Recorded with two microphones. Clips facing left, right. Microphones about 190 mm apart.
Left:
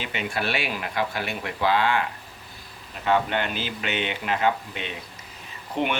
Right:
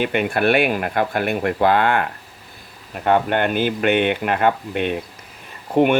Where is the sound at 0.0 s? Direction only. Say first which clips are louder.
Right 10 dB; 55° right (ahead or behind).